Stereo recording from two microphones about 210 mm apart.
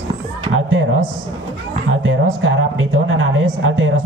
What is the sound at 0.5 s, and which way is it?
Speech, 70° right (ahead or behind).